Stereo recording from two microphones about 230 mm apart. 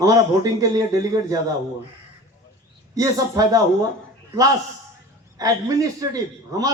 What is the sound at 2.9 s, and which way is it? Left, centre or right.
Speech, centre.